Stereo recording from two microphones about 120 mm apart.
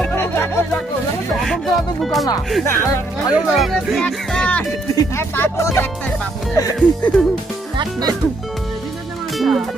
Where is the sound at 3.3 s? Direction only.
Centre (ahead or behind).